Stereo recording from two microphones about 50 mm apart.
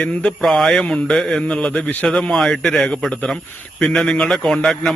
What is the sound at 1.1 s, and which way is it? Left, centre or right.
Speech, centre.